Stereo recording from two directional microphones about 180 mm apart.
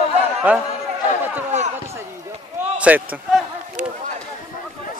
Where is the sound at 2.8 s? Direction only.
10° right (ahead or behind).